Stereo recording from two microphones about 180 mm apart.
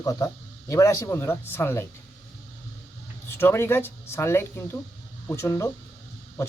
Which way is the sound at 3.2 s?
15° left (ahead or behind).